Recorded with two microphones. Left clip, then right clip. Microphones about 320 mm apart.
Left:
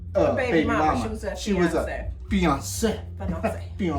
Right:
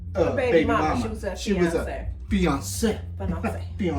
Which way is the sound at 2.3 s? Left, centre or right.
Centre.